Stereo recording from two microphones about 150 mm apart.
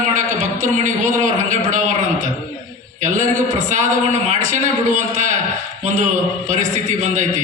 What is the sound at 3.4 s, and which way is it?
A man's voice, 55° right (ahead or behind).